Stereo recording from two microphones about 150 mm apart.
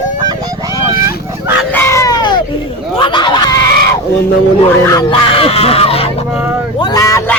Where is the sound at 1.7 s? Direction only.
15° left (ahead or behind).